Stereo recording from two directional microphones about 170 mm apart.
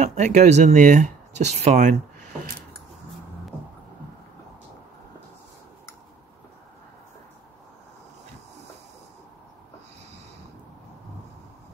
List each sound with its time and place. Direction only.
0.0 s speech: 45° right (ahead or behind)